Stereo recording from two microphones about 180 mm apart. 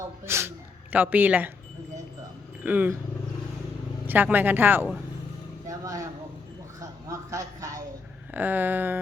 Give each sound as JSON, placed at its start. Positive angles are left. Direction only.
{"t": 0.3, "sound": "speech", "side_deg": -15}
{"t": 2.6, "sound": "speech", "side_deg": -10}
{"t": 4.0, "sound": "speech", "side_deg": -10}
{"t": 5.6, "sound": "a sound", "side_deg": -20}
{"t": 6.7, "sound": "speech", "side_deg": -15}